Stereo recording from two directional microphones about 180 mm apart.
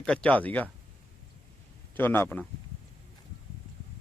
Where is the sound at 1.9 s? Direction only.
10° left (ahead or behind).